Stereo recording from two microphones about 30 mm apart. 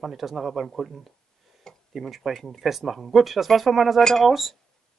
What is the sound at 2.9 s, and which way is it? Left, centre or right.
Speech, centre.